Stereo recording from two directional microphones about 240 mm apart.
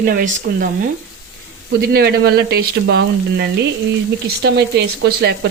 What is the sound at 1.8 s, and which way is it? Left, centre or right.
Speech, right.